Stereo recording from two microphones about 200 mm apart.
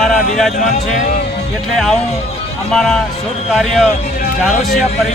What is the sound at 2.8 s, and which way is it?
Speech, centre (ahead or behind).